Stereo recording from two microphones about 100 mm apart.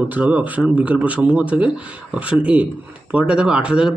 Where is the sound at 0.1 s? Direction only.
15° right (ahead or behind).